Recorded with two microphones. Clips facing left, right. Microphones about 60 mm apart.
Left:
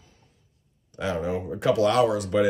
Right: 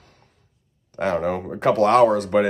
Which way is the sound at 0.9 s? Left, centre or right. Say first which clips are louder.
Right 5 dB; right.